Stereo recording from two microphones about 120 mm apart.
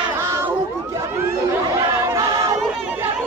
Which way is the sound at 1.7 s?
25° right (ahead or behind).